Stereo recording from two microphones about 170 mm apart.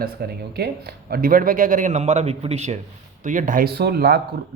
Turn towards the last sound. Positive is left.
turn(degrees=-65)  # may be behind; listen again after turning